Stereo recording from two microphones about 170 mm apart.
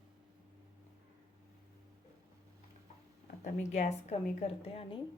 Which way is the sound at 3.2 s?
50° left (ahead or behind).